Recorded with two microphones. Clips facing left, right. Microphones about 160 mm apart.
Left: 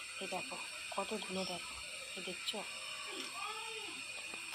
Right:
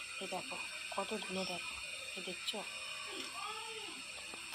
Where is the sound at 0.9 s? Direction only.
Centre (ahead or behind).